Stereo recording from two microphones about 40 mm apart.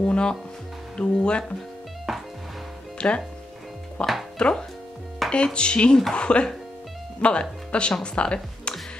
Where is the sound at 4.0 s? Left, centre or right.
Left.